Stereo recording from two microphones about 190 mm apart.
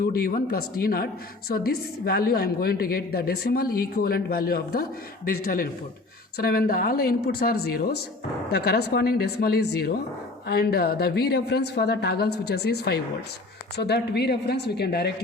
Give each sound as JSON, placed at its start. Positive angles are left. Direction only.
{"t": 0.0, "sound": "a woman's voice", "side_deg": 50}